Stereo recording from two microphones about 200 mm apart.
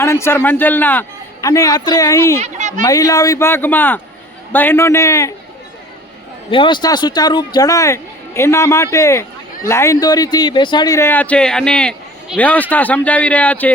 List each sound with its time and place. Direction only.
0.0 s a man's voice: 10° left (ahead or behind)
2.4 s speech: 35° right (ahead or behind)
2.8 s speech: 15° left (ahead or behind)
6.5 s speech: 25° left (ahead or behind); by 13.7 s 5° left (ahead or behind)